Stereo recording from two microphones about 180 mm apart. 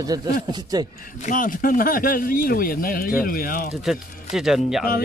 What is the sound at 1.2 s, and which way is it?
Speech, 50° left (ahead or behind).